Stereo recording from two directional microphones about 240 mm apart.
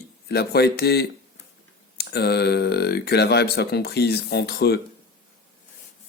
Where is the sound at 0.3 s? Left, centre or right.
Left.